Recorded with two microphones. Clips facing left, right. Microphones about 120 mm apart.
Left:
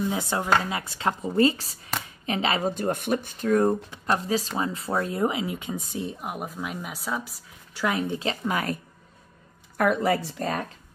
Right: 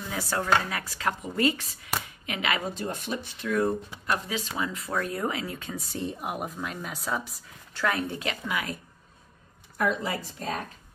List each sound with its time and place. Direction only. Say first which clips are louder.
0.1 s speech: left 2 dB; 20° left (ahead or behind)
2.7 s speech: left 7 dB; 55° left (ahead or behind); by 5.9 s 20° left (ahead or behind)
5.9 s speech: right 3 dB; centre (ahead or behind)
7.7 s speech: left 1 dB; 15° left (ahead or behind)
8.2 s speech: left 4 dB; 30° left (ahead or behind)
9.8 s speech: left 6 dB; 60° left (ahead or behind)